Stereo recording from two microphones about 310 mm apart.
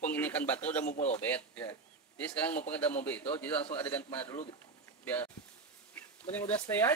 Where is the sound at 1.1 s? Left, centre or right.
Centre.